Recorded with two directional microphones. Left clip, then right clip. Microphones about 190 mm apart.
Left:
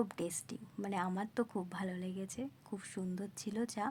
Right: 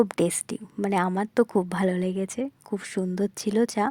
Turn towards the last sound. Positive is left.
turn(degrees=-40)  # may be behind; listen again after turning